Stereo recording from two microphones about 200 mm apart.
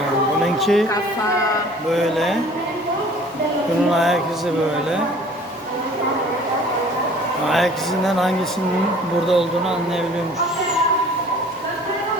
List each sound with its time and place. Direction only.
0.4 s a sound: centre (ahead or behind)
1.9 s speech: centre (ahead or behind)
3.9 s speech: centre (ahead or behind)
7.5 s speech: centre (ahead or behind)